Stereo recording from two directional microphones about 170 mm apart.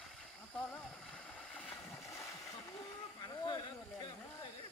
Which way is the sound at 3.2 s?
25° left (ahead or behind).